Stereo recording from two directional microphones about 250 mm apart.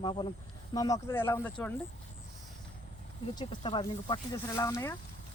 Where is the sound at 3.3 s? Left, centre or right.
Centre.